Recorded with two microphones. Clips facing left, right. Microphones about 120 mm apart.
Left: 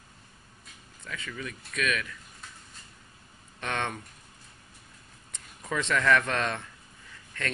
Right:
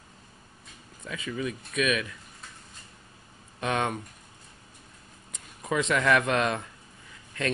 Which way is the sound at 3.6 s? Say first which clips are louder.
Right 4 dB; 15° right (ahead or behind).